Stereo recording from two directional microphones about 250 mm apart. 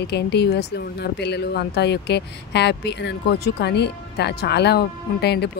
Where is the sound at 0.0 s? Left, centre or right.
Left.